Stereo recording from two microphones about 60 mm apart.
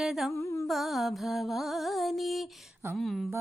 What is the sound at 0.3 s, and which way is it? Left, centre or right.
Carnatic music, left.